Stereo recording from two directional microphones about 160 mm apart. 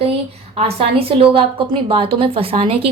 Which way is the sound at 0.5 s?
40° right (ahead or behind).